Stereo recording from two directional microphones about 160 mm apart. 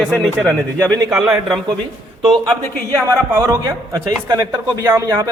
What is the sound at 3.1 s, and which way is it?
A man's voice, 15° right (ahead or behind).